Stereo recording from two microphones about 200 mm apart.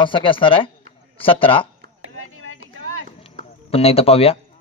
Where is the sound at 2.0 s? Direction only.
90° right.